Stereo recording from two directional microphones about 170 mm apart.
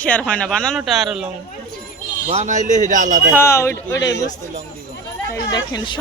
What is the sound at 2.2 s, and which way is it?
Speech, 40° right (ahead or behind).